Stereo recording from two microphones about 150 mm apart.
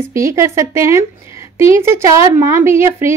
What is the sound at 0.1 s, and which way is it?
A woman's voice, 20° right (ahead or behind).